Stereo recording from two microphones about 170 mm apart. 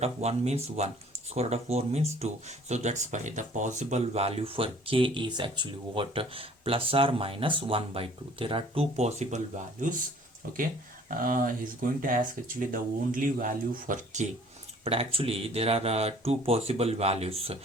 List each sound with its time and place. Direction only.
0.0 s speech: 40° right (ahead or behind)
11.2 s speech: 55° right (ahead or behind)
14.8 s speech: 35° right (ahead or behind)